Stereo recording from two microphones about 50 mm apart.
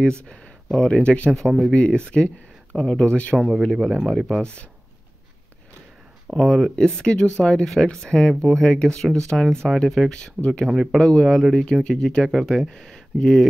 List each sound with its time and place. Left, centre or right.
0.0 s speech: centre
3.3 s speech: centre
6.3 s speech: centre
10.4 s speech: centre
10.7 s speech: centre
11.0 s speech: centre
11.2 s speech: centre